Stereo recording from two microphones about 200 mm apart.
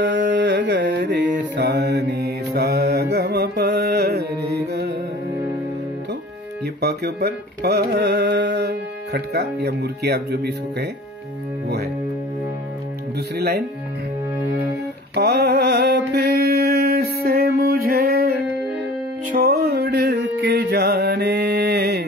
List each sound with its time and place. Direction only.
0.0 s music: 60° right (ahead or behind)
1.6 s mantra: 55° right (ahead or behind)
6.8 s carnatic music: 55° right (ahead or behind)
15.1 s mantra: 55° right (ahead or behind)
19.3 s music: 50° right (ahead or behind)